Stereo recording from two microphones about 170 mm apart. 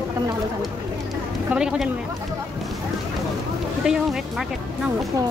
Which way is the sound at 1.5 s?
5° right (ahead or behind).